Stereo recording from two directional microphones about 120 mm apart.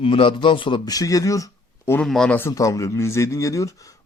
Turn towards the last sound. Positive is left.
turn(degrees=25)  # may be behind; listen again after turning